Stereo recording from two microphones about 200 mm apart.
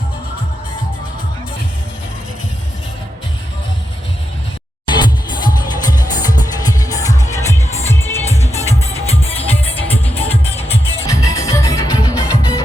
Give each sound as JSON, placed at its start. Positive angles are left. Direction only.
{"t": 4.9, "sound": "music", "side_deg": 20}
{"t": 8.3, "sound": "music", "side_deg": 30}
{"t": 9.9, "sound": "music", "side_deg": 30}
{"t": 10.7, "sound": "music", "side_deg": 15}